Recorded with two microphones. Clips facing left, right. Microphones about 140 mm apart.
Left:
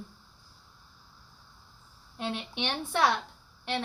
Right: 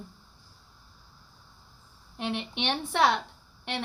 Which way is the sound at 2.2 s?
20° right (ahead or behind).